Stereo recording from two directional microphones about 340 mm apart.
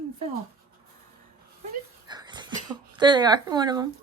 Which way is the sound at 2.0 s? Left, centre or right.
Centre.